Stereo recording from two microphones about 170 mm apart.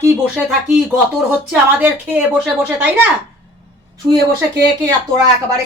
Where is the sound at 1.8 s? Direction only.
5° right (ahead or behind).